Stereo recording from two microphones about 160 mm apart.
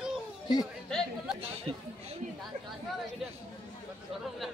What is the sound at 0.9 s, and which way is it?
Speech, 5° left (ahead or behind).